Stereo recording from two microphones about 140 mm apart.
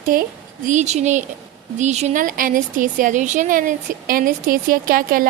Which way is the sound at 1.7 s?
55° right (ahead or behind).